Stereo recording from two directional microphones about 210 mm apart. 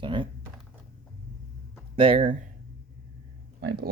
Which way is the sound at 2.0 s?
25° right (ahead or behind).